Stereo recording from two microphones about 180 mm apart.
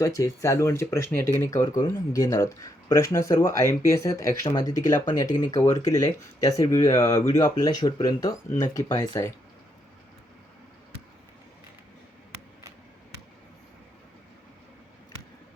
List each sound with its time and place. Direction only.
0.0 s speech: 15° left (ahead or behind)